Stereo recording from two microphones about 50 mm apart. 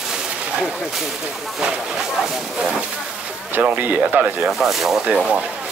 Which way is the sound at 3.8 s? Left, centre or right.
Right.